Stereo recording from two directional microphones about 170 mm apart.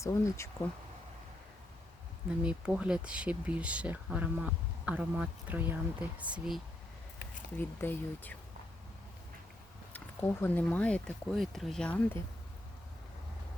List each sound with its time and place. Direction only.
0.0 s speech: 20° left (ahead or behind)
2.4 s speech: 5° right (ahead or behind)
7.8 s speech: 10° left (ahead or behind)
9.9 s speech: 10° left (ahead or behind)